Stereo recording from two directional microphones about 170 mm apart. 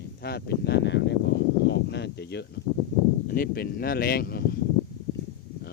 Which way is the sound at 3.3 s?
60° left (ahead or behind).